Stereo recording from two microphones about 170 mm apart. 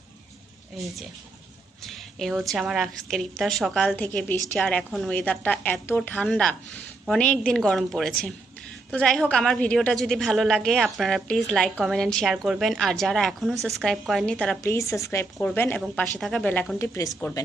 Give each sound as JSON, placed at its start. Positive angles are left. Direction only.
{"t": 0.7, "sound": "a woman's voice", "side_deg": 0}
{"t": 14.6, "sound": "a woman's voice", "side_deg": 15}